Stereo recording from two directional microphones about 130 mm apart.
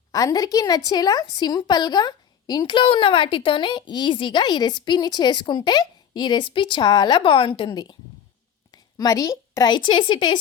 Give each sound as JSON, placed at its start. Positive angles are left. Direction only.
{"t": 0.1, "sound": "a woman's voice", "side_deg": 30}